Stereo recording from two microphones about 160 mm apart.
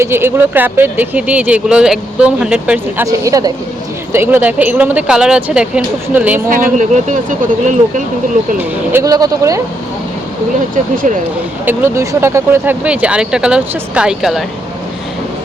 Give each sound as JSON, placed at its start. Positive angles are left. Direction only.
{"t": 0.0, "sound": "speech", "side_deg": -15}
{"t": 3.1, "sound": "speech", "side_deg": -20}
{"t": 6.5, "sound": "speech", "side_deg": -55}
{"t": 8.5, "sound": "speech", "side_deg": -15}
{"t": 10.9, "sound": "speech", "side_deg": -55}
{"t": 11.6, "sound": "speech", "side_deg": -15}